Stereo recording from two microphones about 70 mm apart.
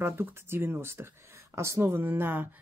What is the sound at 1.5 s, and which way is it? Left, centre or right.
Speech, right.